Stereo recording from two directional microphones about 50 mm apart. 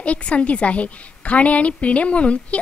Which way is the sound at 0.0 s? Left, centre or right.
Left.